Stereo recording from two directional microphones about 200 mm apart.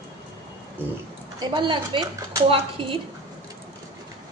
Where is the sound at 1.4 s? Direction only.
25° right (ahead or behind).